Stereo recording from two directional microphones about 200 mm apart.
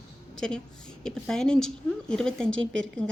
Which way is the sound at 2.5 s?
70° right (ahead or behind).